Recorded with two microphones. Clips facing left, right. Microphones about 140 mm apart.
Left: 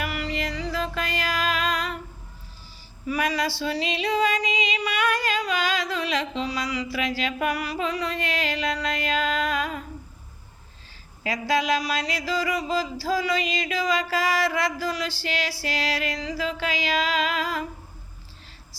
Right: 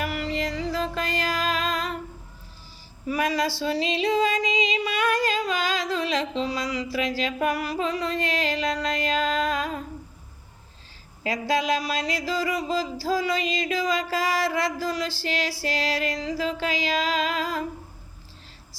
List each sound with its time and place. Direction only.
0.0 s music: 45° right (ahead or behind)
3.1 s music: 40° right (ahead or behind)
3.7 s music: 30° right (ahead or behind)
4.9 s a sound: 40° right (ahead or behind)
8.2 s music: 40° right (ahead or behind)
11.2 s a sound: 45° right (ahead or behind)